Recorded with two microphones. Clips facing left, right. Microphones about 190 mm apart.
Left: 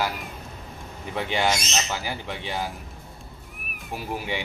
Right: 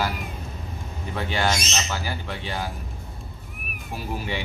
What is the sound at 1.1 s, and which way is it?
Speech, 15° left (ahead or behind).